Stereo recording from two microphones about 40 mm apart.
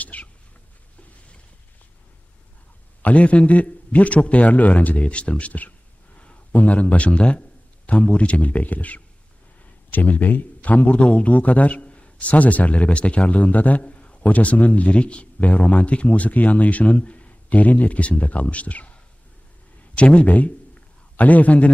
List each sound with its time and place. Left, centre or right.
0.0 s cat: left
3.0 s a man's voice: left
20.0 s a man's voice: left